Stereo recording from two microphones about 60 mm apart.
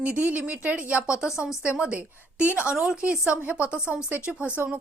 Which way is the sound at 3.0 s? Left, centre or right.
Right.